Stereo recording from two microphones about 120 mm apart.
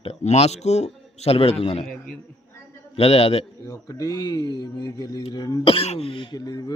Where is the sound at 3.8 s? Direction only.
30° left (ahead or behind).